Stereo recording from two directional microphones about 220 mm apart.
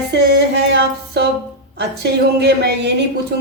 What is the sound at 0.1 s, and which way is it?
Music, 50° right (ahead or behind).